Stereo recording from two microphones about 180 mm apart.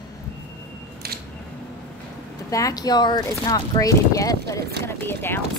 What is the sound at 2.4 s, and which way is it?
Speech, 20° left (ahead or behind).